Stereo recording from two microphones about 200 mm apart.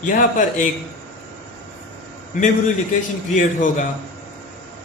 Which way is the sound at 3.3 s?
40° left (ahead or behind).